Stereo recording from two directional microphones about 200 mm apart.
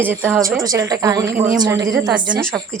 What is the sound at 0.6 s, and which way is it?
Speech, 20° right (ahead or behind).